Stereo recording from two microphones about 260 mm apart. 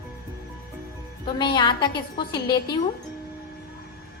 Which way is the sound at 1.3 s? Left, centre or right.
Centre.